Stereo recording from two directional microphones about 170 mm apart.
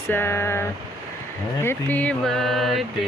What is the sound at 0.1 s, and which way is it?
Vehicle, 15° left (ahead or behind).